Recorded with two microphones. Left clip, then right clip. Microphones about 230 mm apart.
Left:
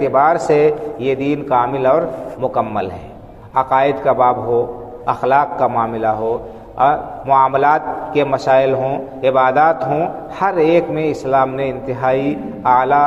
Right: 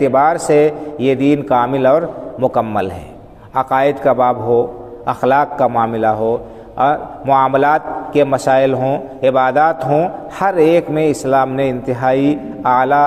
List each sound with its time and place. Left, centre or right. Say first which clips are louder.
0.0 s a man's voice: right 1 dB; right